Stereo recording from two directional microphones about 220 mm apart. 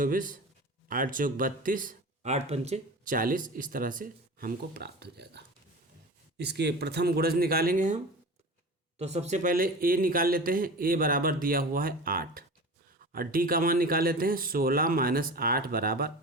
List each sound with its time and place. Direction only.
0.0 s speech: 40° right (ahead or behind)
9.0 s speech: 30° right (ahead or behind)